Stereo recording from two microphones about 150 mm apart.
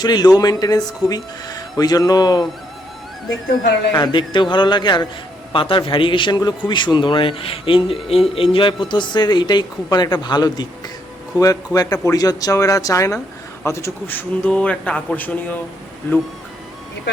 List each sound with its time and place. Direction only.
0.0 s speech: 30° left (ahead or behind)
3.9 s a man's voice: 30° left (ahead or behind); by 16.2 s 15° left (ahead or behind)